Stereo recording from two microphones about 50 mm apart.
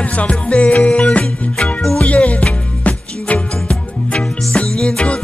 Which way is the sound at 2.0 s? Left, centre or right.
Left.